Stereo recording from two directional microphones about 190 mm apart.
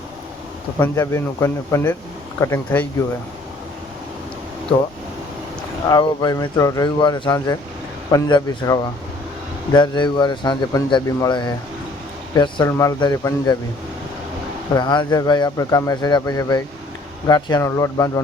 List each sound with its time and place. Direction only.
0.8 s speech: 15° left (ahead or behind)
5.9 s speech: 20° left (ahead or behind)
14.7 s speech: 20° left (ahead or behind)